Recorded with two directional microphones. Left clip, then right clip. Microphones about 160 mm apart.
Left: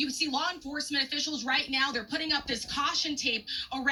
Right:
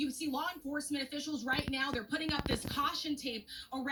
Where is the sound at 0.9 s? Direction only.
20° left (ahead or behind).